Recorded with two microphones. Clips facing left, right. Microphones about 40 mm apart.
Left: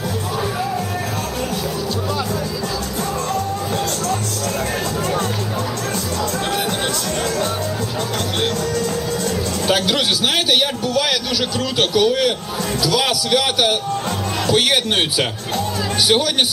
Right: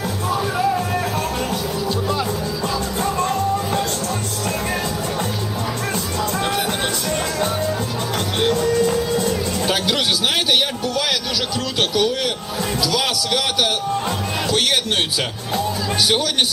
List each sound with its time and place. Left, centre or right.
8.7 s music: right
9.3 s music: centre
10.5 s a sound: centre
11.8 s a man's voice: centre
14.4 s music: centre